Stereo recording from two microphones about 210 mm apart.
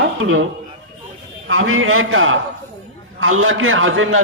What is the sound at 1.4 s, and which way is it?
A man's voice, 75° right (ahead or behind).